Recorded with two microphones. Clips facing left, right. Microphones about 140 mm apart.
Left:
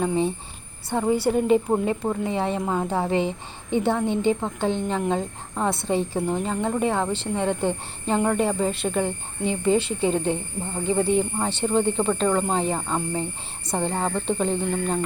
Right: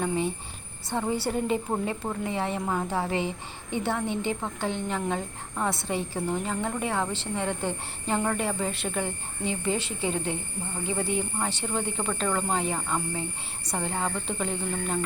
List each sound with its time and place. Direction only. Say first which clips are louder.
0.9 s speech: left 6 dB; 15° left (ahead or behind)
11.3 s speech: left 7 dB; 20° left (ahead or behind)